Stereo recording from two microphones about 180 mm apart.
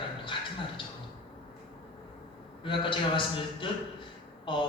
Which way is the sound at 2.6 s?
30° left (ahead or behind).